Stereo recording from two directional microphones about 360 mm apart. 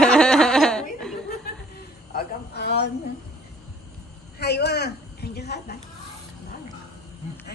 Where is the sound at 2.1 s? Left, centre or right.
Left.